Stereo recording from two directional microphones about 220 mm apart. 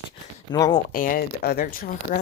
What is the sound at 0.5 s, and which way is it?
Speech, 20° left (ahead or behind).